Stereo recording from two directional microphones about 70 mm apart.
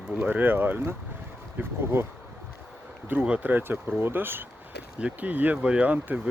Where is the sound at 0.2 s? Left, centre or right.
Right.